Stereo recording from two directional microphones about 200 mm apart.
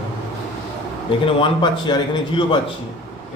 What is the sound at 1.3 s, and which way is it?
A man's voice, 25° left (ahead or behind).